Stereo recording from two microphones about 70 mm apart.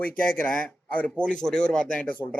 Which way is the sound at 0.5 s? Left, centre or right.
Left.